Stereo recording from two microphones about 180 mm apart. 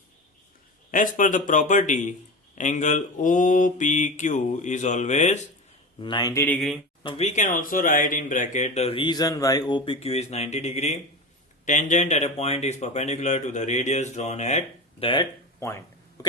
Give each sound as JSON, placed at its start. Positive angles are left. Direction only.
{"t": 0.9, "sound": "mantra", "side_deg": 45}
{"t": 6.0, "sound": "a man's voice", "side_deg": 25}
{"t": 6.4, "sound": "speech", "side_deg": 5}
{"t": 7.0, "sound": "speech", "side_deg": 30}
{"t": 15.6, "sound": "speech", "side_deg": 15}